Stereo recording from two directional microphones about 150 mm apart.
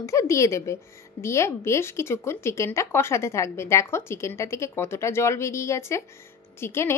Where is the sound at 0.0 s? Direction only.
20° left (ahead or behind).